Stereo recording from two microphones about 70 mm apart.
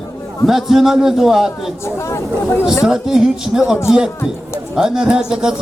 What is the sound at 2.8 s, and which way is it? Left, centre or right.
Speech, centre.